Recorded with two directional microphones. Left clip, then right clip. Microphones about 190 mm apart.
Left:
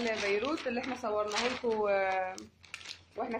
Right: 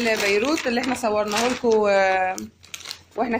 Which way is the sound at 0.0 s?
50° right (ahead or behind).